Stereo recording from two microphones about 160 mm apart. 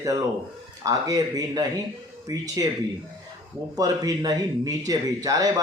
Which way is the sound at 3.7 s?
25° right (ahead or behind).